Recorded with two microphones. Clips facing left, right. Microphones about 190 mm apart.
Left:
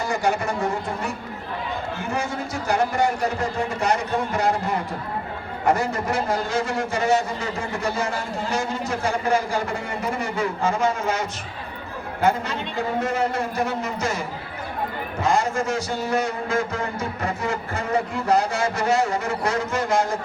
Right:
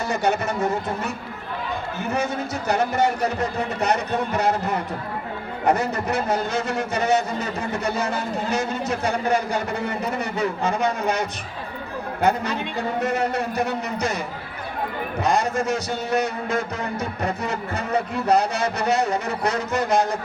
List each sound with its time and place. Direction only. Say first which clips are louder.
0.1 s a man's voice: right 1 dB; 20° right (ahead or behind)
15.2 s a man's voice: even; 20° right (ahead or behind)